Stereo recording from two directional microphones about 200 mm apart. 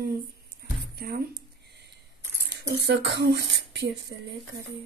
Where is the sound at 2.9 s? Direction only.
60° right (ahead or behind).